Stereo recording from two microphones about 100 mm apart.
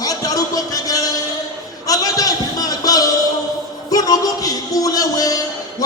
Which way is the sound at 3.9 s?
40° left (ahead or behind).